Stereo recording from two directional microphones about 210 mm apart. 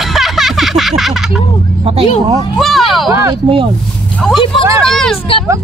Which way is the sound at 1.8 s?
30° right (ahead or behind).